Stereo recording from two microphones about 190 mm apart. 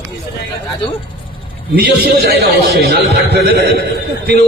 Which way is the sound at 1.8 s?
60° right (ahead or behind).